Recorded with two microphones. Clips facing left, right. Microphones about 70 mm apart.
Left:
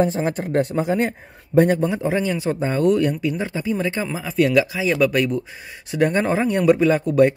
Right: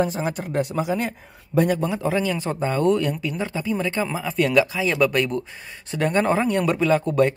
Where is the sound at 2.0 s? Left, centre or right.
Left.